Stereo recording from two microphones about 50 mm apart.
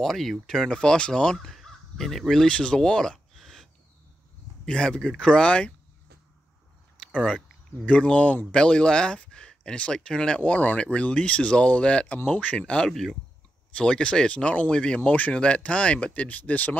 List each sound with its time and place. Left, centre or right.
0.0 s speech: centre
4.6 s speech: centre
7.2 s speech: left
12.8 s speech: centre
13.7 s speech: left
15.0 s speech: left